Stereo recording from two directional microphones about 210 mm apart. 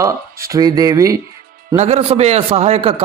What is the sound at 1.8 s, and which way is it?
A man's voice, 30° right (ahead or behind).